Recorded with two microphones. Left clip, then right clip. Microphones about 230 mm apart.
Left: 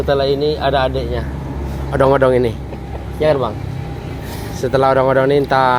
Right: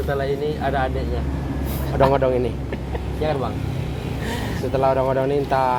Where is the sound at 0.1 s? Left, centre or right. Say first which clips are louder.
Left 9 dB; left.